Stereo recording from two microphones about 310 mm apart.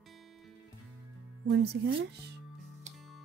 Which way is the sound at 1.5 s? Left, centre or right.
Right.